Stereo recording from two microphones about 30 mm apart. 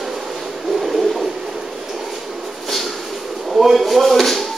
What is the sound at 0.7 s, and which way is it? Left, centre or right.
Bird, centre.